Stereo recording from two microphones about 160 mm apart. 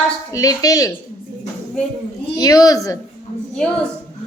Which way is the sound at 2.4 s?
25° left (ahead or behind).